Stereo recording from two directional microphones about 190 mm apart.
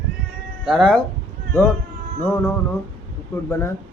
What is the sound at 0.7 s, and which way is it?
Speech, centre (ahead or behind).